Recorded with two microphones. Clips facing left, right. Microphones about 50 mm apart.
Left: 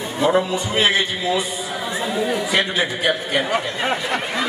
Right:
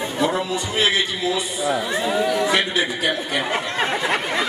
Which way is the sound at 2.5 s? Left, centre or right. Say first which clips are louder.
Even; left.